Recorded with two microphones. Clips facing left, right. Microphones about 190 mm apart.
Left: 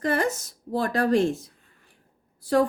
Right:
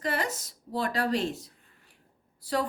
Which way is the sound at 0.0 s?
50° left (ahead or behind).